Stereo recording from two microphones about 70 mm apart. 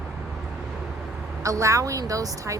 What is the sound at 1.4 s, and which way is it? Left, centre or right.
Speech, right.